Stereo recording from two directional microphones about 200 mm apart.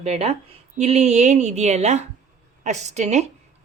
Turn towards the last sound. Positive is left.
turn(degrees=-35)  # may be behind; listen again after turning